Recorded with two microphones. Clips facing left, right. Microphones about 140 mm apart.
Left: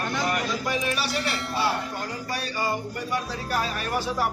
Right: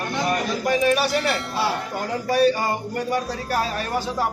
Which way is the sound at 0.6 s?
55° right (ahead or behind).